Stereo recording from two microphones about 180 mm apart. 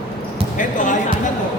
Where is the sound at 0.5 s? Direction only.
45° left (ahead or behind).